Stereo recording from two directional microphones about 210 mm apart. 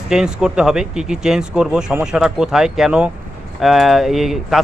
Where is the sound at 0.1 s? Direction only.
5° right (ahead or behind).